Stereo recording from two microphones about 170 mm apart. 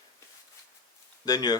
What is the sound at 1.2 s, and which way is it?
Speech, 25° left (ahead or behind).